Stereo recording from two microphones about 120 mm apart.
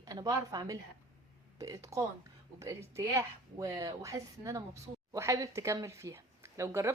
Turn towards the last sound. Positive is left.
turn(degrees=-25)  # may be behind; listen again after turning